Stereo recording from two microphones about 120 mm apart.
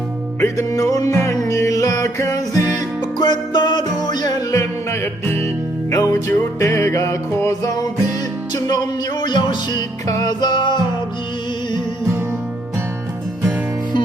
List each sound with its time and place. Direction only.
0.3 s music: 25° left (ahead or behind)
3.2 s music: 40° left (ahead or behind)